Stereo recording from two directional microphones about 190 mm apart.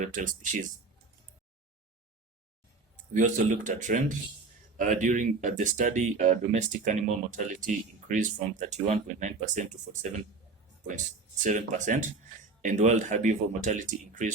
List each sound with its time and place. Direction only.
0.0 s speech: 40° right (ahead or behind)
3.1 s speech: 40° right (ahead or behind)
11.4 s speech: 40° right (ahead or behind)